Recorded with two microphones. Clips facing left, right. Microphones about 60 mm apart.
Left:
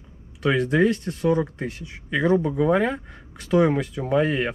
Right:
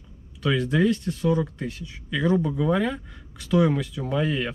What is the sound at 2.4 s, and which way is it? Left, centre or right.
Speech, left.